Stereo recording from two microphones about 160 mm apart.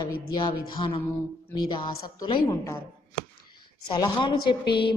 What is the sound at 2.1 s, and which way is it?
Speech, 30° left (ahead or behind).